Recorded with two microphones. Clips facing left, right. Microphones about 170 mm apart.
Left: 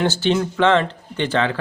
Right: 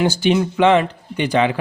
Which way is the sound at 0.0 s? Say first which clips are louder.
Right 2 dB; 15° right (ahead or behind).